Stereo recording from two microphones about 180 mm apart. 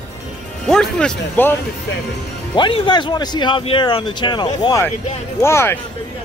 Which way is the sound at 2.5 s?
25° left (ahead or behind).